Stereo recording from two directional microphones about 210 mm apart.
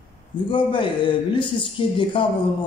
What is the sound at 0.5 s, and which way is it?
Speech, 20° left (ahead or behind).